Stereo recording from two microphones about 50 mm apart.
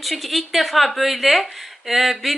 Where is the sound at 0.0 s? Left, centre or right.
Centre.